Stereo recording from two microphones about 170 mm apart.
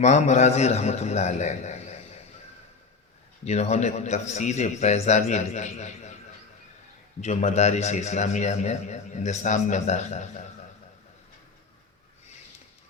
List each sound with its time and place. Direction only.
0.0 s a man's voice: 45° left (ahead or behind)
3.4 s speech: 40° left (ahead or behind)
7.2 s speech: 40° left (ahead or behind)